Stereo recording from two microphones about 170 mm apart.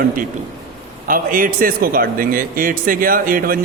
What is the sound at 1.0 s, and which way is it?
A man's voice, 55° right (ahead or behind).